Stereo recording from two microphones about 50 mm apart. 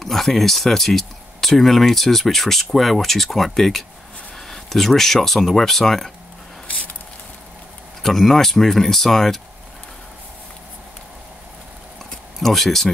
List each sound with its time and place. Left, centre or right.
0.0 s speech: centre
8.0 s speech: centre
12.4 s speech: centre